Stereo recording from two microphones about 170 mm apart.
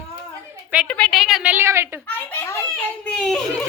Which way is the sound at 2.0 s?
15° left (ahead or behind).